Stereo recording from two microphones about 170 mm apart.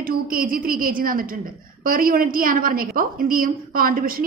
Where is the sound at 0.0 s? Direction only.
55° right (ahead or behind).